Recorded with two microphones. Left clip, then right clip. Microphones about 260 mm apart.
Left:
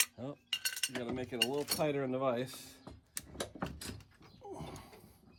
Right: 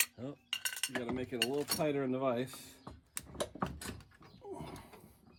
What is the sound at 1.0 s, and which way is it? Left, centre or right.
Cutlery, centre.